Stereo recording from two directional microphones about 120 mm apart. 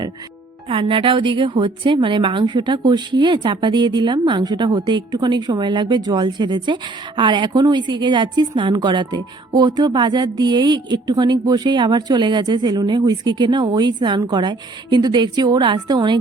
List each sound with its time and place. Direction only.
0.7 s a woman's voice: 45° right (ahead or behind)